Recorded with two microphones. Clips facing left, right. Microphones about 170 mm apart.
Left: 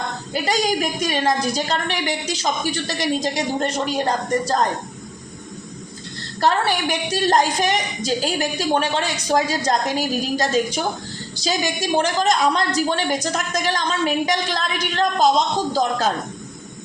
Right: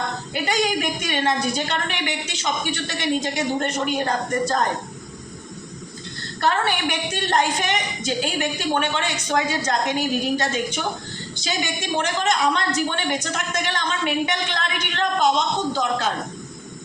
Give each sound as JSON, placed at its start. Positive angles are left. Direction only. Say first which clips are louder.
{"t": 0.4, "sound": "a woman's voice", "louder": "left 1 dB", "side_deg": 35}
{"t": 6.4, "sound": "a woman's voice", "louder": "left 2 dB", "side_deg": 35}